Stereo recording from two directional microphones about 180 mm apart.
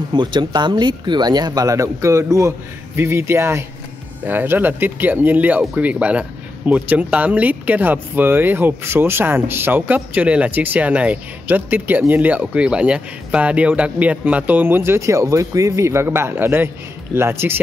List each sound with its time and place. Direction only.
0.1 s speech: 25° right (ahead or behind)